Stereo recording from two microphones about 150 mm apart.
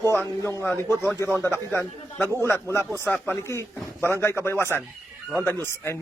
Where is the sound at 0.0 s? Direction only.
15° left (ahead or behind).